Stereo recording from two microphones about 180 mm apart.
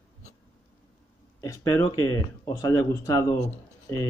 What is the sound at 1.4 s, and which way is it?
Speech, 20° left (ahead or behind).